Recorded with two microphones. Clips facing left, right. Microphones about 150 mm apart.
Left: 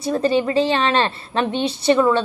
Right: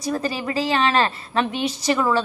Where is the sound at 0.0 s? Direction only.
30° left (ahead or behind).